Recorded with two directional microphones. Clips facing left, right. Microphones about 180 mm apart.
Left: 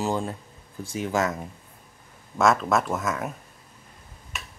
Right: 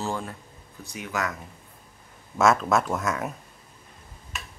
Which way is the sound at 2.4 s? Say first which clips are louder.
Even; centre (ahead or behind).